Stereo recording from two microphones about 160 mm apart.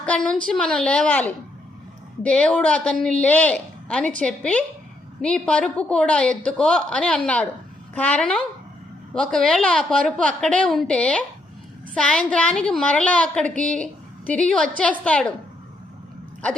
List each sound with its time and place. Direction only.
0.0 s a woman's voice: 5° left (ahead or behind)